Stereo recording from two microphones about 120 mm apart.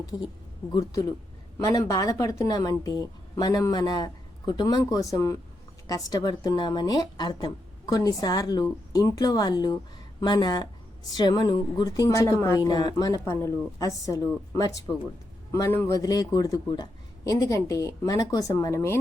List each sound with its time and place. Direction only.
0.7 s a woman's voice: 30° left (ahead or behind)
16.0 s speech: 30° left (ahead or behind)